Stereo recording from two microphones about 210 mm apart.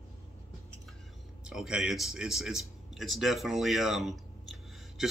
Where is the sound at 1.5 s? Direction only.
5° right (ahead or behind).